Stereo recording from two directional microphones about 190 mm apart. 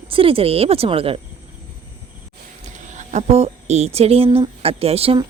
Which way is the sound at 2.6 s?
40° right (ahead or behind).